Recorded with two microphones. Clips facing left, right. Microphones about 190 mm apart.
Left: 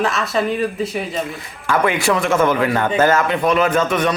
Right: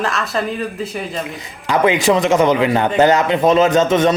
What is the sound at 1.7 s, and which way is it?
Speech, 20° right (ahead or behind).